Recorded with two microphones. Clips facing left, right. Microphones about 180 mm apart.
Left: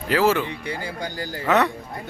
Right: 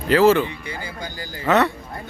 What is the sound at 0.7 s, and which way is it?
Speech, 65° left (ahead or behind).